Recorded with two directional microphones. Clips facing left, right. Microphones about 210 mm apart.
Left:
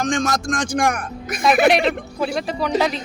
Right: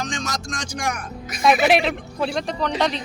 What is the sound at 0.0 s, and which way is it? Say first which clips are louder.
A man's voice: left 8 dB; 50° left (ahead or behind).